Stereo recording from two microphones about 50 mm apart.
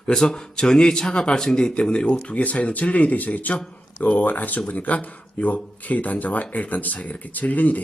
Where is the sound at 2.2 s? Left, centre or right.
Left.